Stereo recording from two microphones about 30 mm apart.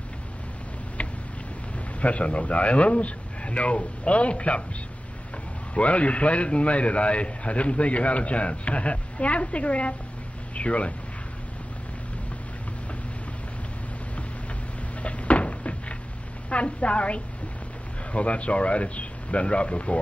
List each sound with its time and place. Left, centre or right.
2.0 s a man's voice: left
5.8 s a man's voice: left
10.5 s a sound: left
15.0 s cupboard open or close: left
16.4 s a woman's voice: left